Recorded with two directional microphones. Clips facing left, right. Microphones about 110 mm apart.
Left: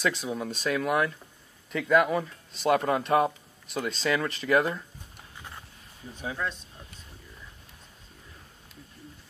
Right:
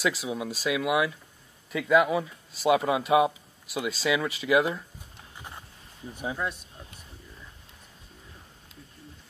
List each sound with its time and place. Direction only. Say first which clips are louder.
0.0 s speech: even; 5° right (ahead or behind)
6.1 s speech: right 1 dB; 15° right (ahead or behind)